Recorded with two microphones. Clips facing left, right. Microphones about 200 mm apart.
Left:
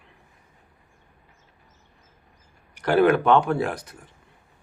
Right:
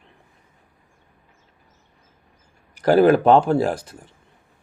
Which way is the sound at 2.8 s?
35° right (ahead or behind).